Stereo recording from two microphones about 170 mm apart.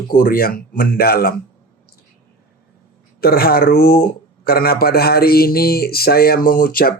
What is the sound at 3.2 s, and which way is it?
Speech, 60° left (ahead or behind).